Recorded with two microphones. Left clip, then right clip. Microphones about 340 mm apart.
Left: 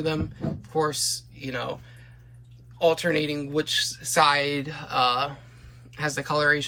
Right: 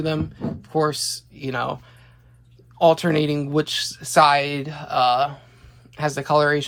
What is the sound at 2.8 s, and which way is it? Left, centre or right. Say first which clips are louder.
Speech: right 5 dB; centre.